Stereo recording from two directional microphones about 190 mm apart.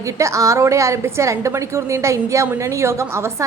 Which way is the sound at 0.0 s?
15° right (ahead or behind).